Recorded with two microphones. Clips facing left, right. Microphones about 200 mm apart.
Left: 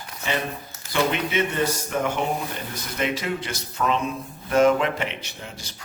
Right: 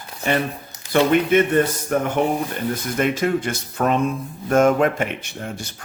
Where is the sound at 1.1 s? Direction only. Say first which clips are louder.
Right 9 dB; 50° right (ahead or behind).